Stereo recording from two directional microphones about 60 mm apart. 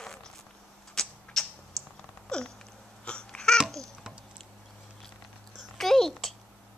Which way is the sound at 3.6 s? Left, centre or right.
Centre.